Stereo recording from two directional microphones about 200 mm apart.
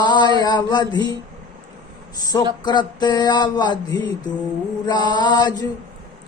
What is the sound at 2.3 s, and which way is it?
Speech, 15° left (ahead or behind).